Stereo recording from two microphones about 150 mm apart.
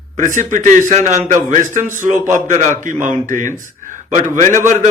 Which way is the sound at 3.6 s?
60° right (ahead or behind).